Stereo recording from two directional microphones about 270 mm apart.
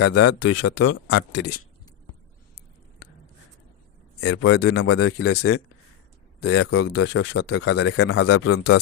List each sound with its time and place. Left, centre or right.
0.0 s a man's voice: left
0.3 s speech: left
0.8 s a man's voice: left
4.2 s speech: left
4.9 s a man's voice: left
6.7 s speech: left
7.0 s a man's voice: left